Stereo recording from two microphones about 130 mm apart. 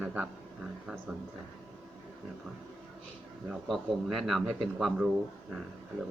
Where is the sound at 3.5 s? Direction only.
Centre (ahead or behind).